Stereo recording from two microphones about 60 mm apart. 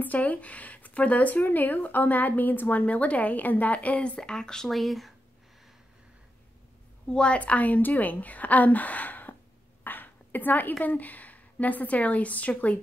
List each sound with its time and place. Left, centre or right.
0.0 s speech: left; by 5.1 s centre
7.1 s speech: centre
9.8 s a sound: left
10.8 s speech: left